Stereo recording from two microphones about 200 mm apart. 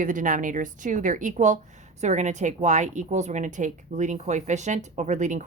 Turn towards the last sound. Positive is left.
turn(degrees=-35)  # may be behind; listen again after turning